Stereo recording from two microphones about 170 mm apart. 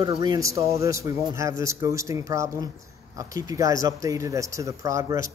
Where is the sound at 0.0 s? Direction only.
25° right (ahead or behind).